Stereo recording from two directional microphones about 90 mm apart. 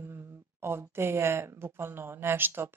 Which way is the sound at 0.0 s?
25° right (ahead or behind).